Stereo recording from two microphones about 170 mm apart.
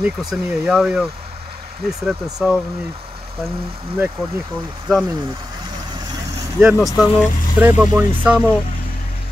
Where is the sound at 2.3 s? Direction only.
5° right (ahead or behind).